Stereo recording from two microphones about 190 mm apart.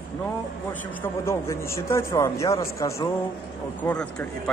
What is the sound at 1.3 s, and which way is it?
A man's voice, 15° left (ahead or behind).